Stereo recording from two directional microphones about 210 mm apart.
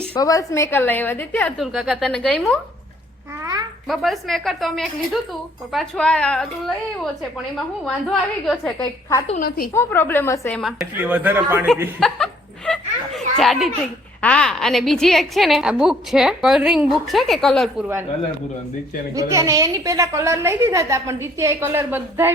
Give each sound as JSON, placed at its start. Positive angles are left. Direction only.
{"t": 0.2, "sound": "a woman's voice", "side_deg": 15}
{"t": 3.4, "sound": "babbling", "side_deg": -20}
{"t": 3.8, "sound": "a woman's voice", "side_deg": 0}
{"t": 7.9, "sound": "a woman's voice", "side_deg": 0}
{"t": 8.8, "sound": "a woman's voice", "side_deg": 15}
{"t": 10.6, "sound": "a woman's voice", "side_deg": 0}
{"t": 11.9, "sound": "laughter", "side_deg": 0}
{"t": 13.4, "sound": "a woman's voice", "side_deg": 0}
{"t": 19.1, "sound": "a woman's voice", "side_deg": -15}